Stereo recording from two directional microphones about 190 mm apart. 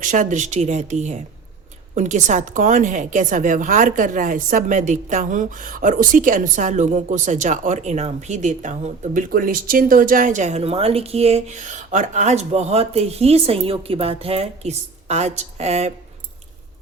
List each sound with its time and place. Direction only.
0.0 s a woman's voice: 45° right (ahead or behind)